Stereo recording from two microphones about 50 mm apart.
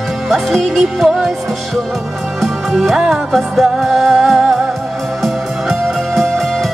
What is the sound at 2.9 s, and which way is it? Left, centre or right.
Music, centre.